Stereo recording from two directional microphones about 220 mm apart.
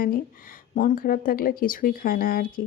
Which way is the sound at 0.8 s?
40° left (ahead or behind).